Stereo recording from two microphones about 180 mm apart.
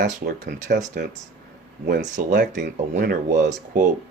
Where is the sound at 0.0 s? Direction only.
70° right (ahead or behind).